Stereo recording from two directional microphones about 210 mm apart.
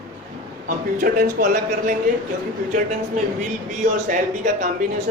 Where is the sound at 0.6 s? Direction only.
40° right (ahead or behind).